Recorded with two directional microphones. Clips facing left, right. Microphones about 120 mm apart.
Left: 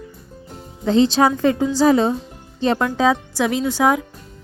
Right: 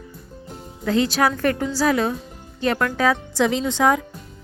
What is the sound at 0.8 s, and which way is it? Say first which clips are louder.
A woman's voice: left 4 dB; 25° left (ahead or behind).